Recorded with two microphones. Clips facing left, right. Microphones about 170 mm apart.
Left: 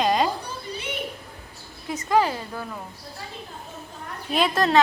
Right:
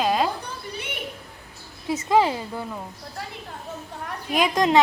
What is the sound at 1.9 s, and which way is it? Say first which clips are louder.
Speech: right 2 dB; 20° right (ahead or behind).